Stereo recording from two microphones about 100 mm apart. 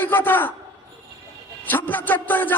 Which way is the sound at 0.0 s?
20° left (ahead or behind).